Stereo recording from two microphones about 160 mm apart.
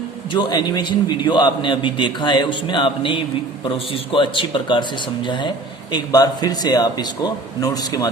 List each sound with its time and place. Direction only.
0.3 s speech: 25° left (ahead or behind)